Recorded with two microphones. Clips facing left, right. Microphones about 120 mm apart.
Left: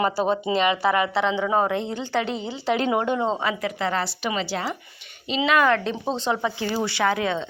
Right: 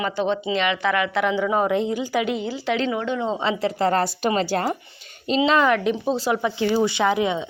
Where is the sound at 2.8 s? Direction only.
50° left (ahead or behind).